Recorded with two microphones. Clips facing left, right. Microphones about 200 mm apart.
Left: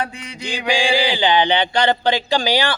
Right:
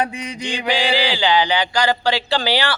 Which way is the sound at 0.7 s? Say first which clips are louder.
Left 2 dB; 10° left (ahead or behind).